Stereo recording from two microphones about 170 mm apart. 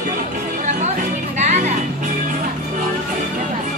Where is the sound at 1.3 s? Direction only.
45° right (ahead or behind).